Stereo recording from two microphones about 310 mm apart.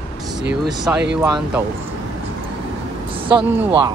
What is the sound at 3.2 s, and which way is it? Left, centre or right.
Speech, centre.